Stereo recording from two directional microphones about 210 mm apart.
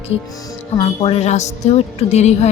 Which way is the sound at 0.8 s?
25° left (ahead or behind).